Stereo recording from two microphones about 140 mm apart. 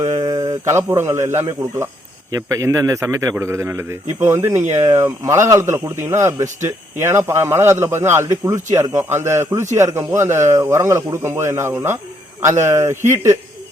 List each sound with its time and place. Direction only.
0.0 s a man's voice: 25° right (ahead or behind)